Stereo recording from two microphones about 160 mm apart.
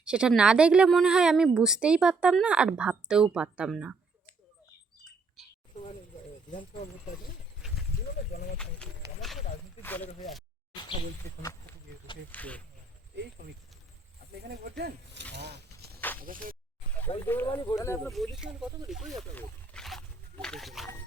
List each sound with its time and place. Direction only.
0.0 s a woman's voice: 5° right (ahead or behind)
5.4 s chink: centre (ahead or behind)
8.5 s clip-clop: 5° left (ahead or behind)
9.8 s speech: 10° left (ahead or behind)
12.3 s speech: 10° left (ahead or behind)
14.4 s speech: 85° right
16.2 s speech: 60° right (ahead or behind)
17.2 s speech: 10° left (ahead or behind)
17.4 s speech: 25° left (ahead or behind)
18.1 s a woman's voice: centre (ahead or behind)
19.4 s wild animals: 5° left (ahead or behind)